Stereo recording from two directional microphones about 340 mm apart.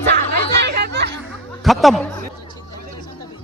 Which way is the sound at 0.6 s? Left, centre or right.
Right.